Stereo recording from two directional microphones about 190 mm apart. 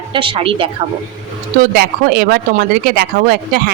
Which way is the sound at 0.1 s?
25° right (ahead or behind).